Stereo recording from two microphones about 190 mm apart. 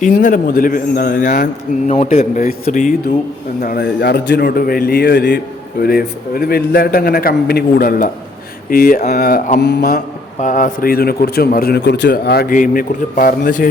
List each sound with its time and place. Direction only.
0.0 s a man's voice: 45° left (ahead or behind); by 10.0 s 60° left (ahead or behind)
10.4 s a man's voice: 40° left (ahead or behind)